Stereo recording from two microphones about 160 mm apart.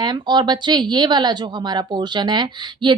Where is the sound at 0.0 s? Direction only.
25° right (ahead or behind).